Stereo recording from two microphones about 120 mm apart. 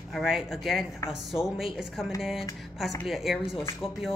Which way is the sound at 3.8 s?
50° left (ahead or behind).